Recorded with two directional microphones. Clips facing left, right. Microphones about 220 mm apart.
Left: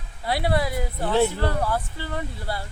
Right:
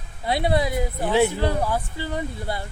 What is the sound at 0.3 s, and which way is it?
Speech, 20° right (ahead or behind).